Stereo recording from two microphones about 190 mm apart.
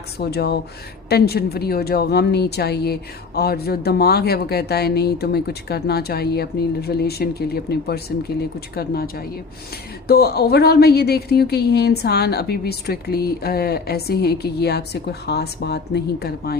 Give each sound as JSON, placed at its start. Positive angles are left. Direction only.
{"t": 0.2, "sound": "speech", "side_deg": 60}